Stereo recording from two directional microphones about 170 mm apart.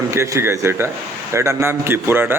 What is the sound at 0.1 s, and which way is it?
Speech, 15° right (ahead or behind).